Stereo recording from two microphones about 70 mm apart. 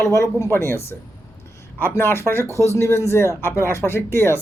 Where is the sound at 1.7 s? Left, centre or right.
Left.